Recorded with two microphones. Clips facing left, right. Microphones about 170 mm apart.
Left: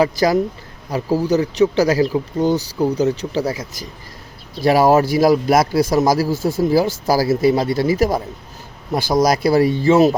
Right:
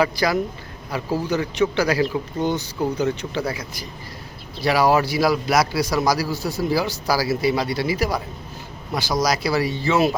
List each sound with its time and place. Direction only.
0.0 s a man's voice: 40° left (ahead or behind)